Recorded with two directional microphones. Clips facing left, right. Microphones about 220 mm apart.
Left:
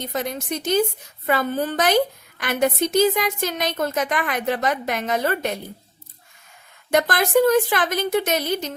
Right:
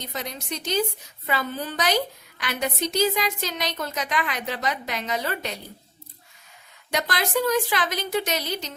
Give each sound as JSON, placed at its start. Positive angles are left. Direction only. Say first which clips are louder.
{"t": 0.0, "sound": "speech", "louder": "left 7 dB", "side_deg": 50}
{"t": 6.9, "sound": "speech", "louder": "left 7 dB", "side_deg": 50}